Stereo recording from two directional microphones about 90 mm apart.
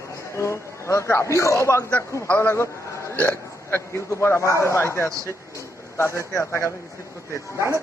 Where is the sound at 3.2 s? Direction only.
20° left (ahead or behind).